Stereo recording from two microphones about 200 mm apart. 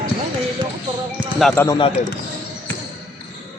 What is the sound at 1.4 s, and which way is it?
Speech, 5° left (ahead or behind).